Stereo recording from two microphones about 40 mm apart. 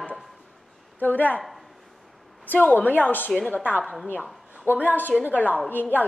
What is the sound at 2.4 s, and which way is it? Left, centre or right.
Speech, left.